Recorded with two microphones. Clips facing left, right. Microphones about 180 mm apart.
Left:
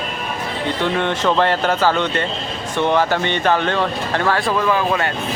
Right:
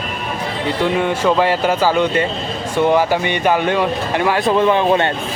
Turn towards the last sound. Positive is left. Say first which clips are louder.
# right 4 dB
turn(degrees=-25)  # may be behind; listen again after turning